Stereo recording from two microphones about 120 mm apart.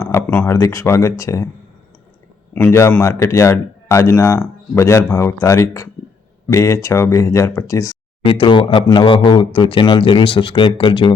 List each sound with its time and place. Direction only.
0.0 s speech: 15° left (ahead or behind)
2.6 s speech: 20° left (ahead or behind)
8.2 s speech: 45° left (ahead or behind)